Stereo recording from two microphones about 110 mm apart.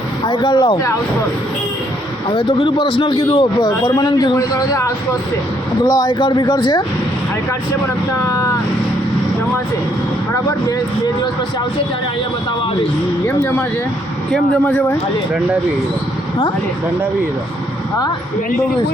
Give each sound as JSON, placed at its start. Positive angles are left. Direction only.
{"t": 0.3, "sound": "speech", "side_deg": 50}
{"t": 2.3, "sound": "a man's voice", "side_deg": 60}
{"t": 3.9, "sound": "a man's voice", "side_deg": 35}
{"t": 6.1, "sound": "speech", "side_deg": 45}
{"t": 8.2, "sound": "speech", "side_deg": 30}
{"t": 10.3, "sound": "a man's voice", "side_deg": 35}
{"t": 13.2, "sound": "speech", "side_deg": 20}